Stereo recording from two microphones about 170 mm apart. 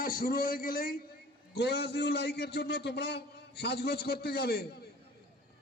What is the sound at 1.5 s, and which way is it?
A man's voice, 75° left (ahead or behind).